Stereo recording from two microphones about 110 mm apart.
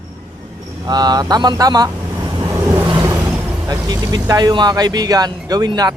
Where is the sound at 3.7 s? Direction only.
30° right (ahead or behind).